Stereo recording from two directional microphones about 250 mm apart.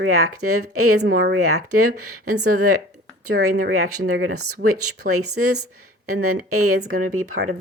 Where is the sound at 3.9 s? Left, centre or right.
Right.